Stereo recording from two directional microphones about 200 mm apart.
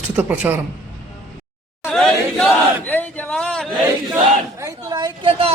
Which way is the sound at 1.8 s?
5° left (ahead or behind).